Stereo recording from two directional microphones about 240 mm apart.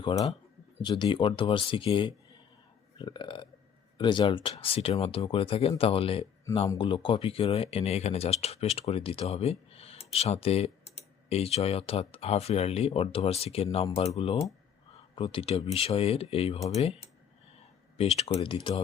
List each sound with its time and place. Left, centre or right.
0.0 s speech: left
17.9 s speech: left